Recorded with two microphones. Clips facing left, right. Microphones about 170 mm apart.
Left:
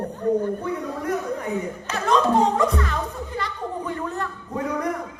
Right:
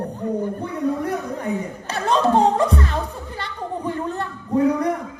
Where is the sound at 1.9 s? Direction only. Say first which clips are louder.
Right 1 dB; 35° right (ahead or behind).